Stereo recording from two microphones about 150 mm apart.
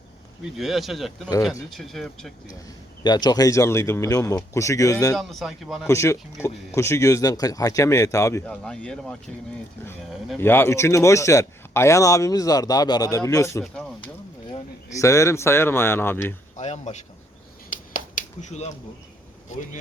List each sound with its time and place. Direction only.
0.5 s speech: centre (ahead or behind)
3.0 s a man's voice: 30° left (ahead or behind)
5.1 s speech: centre (ahead or behind)
5.9 s a man's voice: 20° left (ahead or behind)
8.6 s speech: 5° left (ahead or behind)
10.3 s a man's voice: 15° left (ahead or behind)
14.9 s speech: 20° left (ahead or behind)
16.6 s speech: 50° left (ahead or behind)
17.9 s a sound: 55° left (ahead or behind)
19.5 s speech: 55° left (ahead or behind)